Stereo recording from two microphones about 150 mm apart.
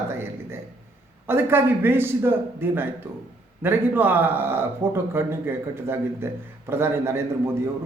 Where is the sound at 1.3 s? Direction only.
15° right (ahead or behind).